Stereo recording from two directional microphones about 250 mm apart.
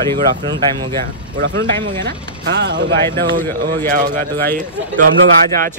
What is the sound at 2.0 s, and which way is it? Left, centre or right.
Speech, right.